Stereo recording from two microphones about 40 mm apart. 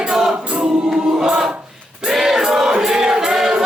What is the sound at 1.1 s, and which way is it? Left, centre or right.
Choir, centre.